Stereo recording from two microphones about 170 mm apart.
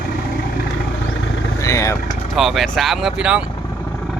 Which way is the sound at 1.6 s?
20° left (ahead or behind).